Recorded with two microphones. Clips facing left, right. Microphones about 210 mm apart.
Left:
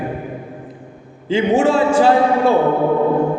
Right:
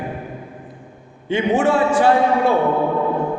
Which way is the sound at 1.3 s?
25° left (ahead or behind).